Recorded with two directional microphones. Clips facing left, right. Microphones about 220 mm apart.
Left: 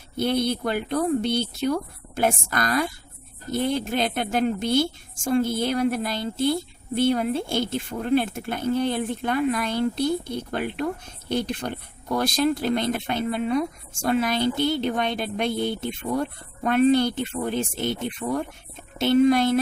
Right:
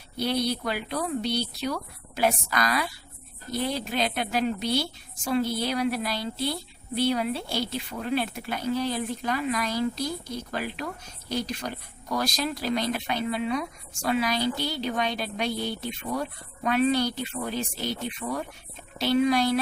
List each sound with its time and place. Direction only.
0.2 s a woman's voice: 50° left (ahead or behind)